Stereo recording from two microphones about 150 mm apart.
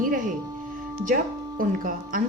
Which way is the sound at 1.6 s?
65° right (ahead or behind).